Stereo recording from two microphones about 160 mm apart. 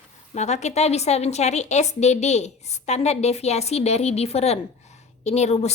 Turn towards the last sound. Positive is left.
turn(degrees=45)  # may be behind; listen again after turning